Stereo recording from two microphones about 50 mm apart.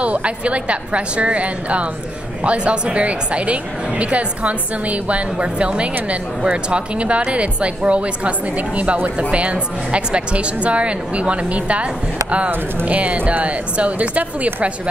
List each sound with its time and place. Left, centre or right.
0.0 s a woman's voice: right